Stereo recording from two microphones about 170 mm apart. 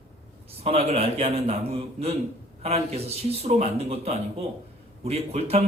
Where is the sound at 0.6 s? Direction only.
35° right (ahead or behind).